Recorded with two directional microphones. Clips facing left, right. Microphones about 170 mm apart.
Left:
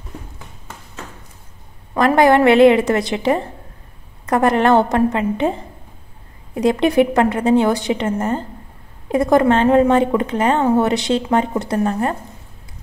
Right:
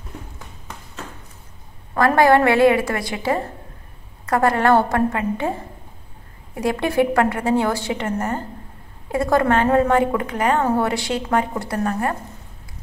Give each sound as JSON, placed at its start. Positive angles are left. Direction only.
{"t": 2.0, "sound": "speech", "side_deg": 20}